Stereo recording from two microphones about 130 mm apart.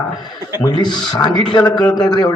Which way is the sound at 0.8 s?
35° left (ahead or behind).